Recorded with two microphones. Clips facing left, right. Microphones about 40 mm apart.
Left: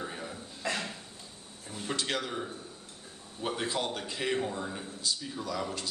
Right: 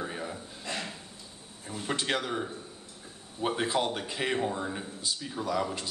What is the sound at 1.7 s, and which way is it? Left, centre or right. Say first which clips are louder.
Speech: right 3 dB; centre.